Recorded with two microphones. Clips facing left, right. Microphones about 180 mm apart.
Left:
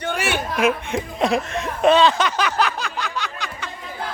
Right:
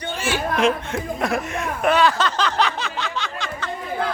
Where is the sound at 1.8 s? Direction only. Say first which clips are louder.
Left 3 dB; 25° left (ahead or behind); by 3.5 s centre (ahead or behind).